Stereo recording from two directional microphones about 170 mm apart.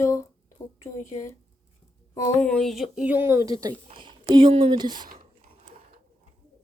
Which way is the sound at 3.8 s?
30° right (ahead or behind).